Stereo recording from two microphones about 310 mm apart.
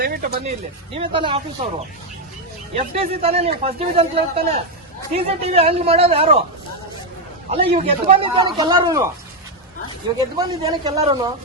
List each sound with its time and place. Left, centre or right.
0.0 s speech: right
0.9 s speech: centre
2.7 s speech: centre
7.5 s speech: centre
10.2 s speech: centre